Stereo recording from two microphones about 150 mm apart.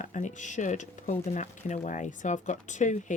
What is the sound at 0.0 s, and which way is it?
Speech, 55° left (ahead or behind).